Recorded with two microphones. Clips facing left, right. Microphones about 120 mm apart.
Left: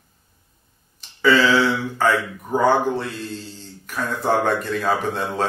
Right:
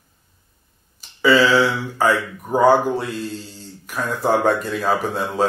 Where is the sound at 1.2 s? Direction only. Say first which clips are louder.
Right 1 dB; 5° right (ahead or behind).